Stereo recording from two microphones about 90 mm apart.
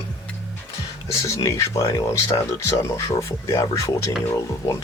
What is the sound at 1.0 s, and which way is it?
Speech, 35° left (ahead or behind).